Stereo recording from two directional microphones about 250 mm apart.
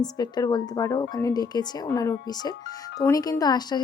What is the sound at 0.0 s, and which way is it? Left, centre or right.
Speech, centre.